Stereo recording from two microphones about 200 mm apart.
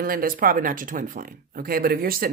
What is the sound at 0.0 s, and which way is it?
Speech, 45° right (ahead or behind).